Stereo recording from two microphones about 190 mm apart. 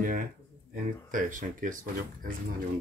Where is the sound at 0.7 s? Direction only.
45° right (ahead or behind).